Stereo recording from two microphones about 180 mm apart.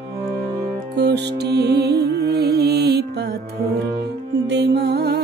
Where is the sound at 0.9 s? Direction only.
65° right (ahead or behind).